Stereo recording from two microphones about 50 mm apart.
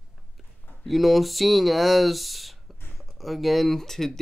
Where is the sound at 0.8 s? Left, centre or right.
Centre.